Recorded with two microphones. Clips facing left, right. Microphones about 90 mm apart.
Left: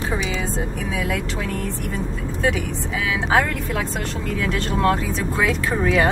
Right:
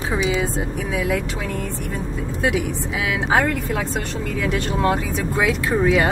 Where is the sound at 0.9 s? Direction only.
10° right (ahead or behind).